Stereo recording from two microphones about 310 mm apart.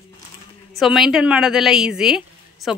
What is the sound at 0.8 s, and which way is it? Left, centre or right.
A woman's voice, centre.